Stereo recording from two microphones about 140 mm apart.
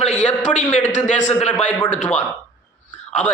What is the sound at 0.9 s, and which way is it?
Speech, 55° left (ahead or behind).